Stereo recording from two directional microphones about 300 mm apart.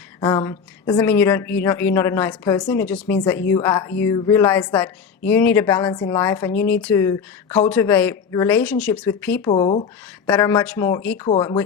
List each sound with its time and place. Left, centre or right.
0.2 s a woman's voice: centre
9.5 s speech: centre
10.2 s a woman's voice: centre